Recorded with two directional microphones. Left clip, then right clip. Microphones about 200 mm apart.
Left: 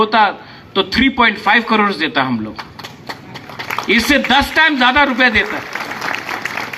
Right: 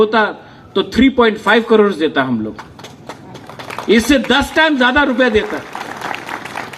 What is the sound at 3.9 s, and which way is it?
Speech, 30° left (ahead or behind).